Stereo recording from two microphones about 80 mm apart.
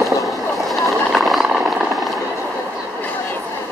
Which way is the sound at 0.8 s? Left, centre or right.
Centre.